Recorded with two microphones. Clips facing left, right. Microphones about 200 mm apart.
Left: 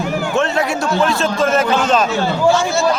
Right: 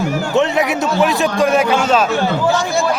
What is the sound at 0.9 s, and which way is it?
A man's voice, 15° right (ahead or behind).